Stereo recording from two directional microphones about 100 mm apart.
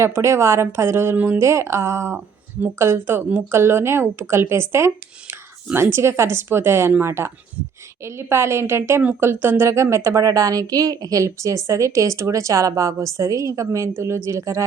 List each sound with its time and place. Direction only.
0.0 s a woman's voice: 30° right (ahead or behind)